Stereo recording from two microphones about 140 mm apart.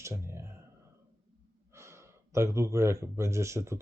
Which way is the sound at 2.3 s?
20° right (ahead or behind).